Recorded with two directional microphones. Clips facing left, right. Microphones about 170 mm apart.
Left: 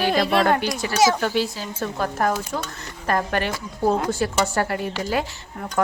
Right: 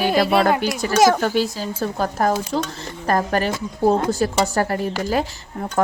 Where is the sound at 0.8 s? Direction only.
45° right (ahead or behind).